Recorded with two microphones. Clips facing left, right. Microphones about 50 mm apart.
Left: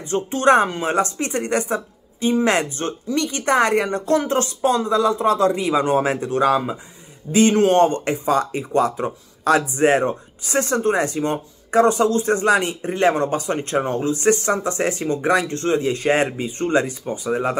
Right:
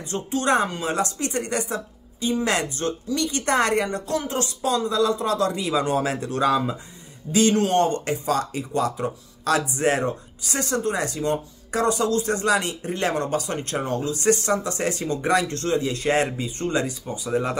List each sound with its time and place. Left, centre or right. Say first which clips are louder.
0.0 s speech: left 7 dB; left
7.3 s speech: left 5 dB; left
17.3 s speech: left 3 dB; left